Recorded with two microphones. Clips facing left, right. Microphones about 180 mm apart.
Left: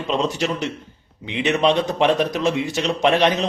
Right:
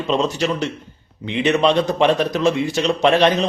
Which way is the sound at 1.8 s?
Centre (ahead or behind).